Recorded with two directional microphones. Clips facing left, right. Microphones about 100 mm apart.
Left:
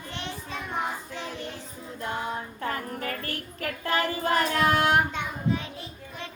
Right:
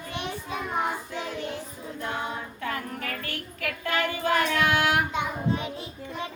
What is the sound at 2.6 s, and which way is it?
Child singing, 35° left (ahead or behind).